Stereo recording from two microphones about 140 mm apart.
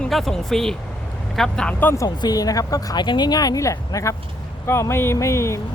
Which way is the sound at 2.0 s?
25° left (ahead or behind).